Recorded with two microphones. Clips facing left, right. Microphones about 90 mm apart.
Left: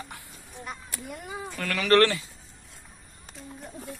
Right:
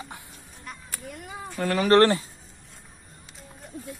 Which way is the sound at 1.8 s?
35° right (ahead or behind).